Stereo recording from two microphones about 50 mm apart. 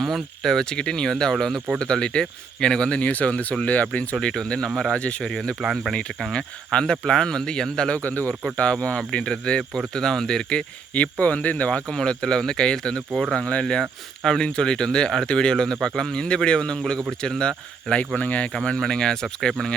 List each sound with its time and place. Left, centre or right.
0.0 s speech: centre
3.0 s speech: left
5.2 s speech: centre
7.9 s speech: left; by 10.6 s centre
10.9 s speech: left
11.9 s speech: centre
18.5 s speech: centre